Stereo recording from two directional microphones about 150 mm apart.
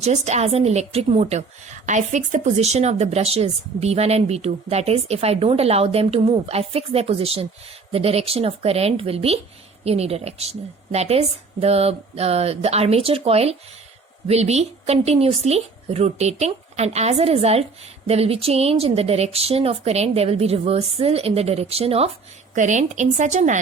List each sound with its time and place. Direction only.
0.0 s a woman's voice: 50° right (ahead or behind)
22.5 s a woman's voice: 55° right (ahead or behind)